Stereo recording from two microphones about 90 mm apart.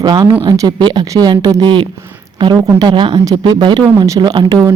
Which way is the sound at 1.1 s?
45° right (ahead or behind).